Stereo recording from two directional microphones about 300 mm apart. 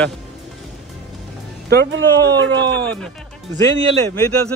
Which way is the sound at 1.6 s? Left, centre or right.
Right.